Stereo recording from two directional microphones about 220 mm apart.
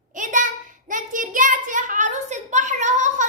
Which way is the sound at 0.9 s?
35° right (ahead or behind).